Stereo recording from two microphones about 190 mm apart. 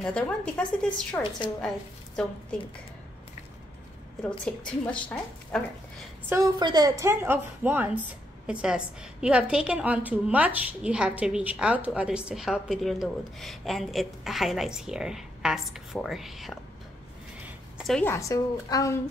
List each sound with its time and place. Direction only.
0.0 s a woman's voice: 5° left (ahead or behind)
4.5 s a woman's voice: 5° left (ahead or behind)
6.2 s a woman's voice: 10° right (ahead or behind)
17.5 s a sound: centre (ahead or behind)
18.0 s a woman's voice: 15° left (ahead or behind)